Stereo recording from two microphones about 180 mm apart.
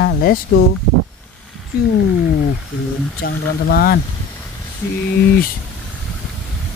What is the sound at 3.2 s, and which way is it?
Speech, 60° left (ahead or behind).